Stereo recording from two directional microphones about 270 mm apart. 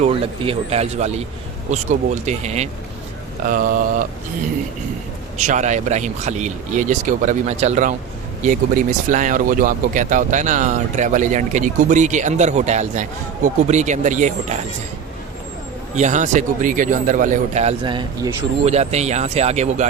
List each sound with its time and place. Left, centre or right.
0.0 s speech: right
5.4 s speech: right
16.0 s speech: right
18.6 s speech: right